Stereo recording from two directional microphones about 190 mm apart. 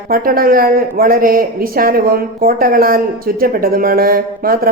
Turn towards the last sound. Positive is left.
turn(degrees=-50)  # may be behind; listen again after turning